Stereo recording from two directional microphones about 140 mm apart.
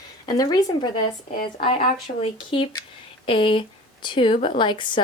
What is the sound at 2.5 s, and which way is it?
A woman's voice, 40° left (ahead or behind).